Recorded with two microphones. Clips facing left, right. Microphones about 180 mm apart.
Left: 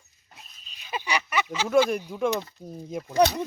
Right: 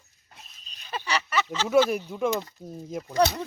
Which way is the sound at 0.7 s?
10° left (ahead or behind).